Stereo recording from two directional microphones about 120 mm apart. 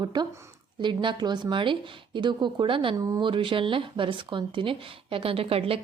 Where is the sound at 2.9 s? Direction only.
30° right (ahead or behind).